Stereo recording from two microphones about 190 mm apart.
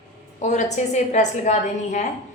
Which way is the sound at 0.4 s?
40° left (ahead or behind).